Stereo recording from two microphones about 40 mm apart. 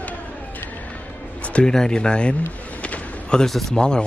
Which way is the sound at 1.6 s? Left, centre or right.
Centre.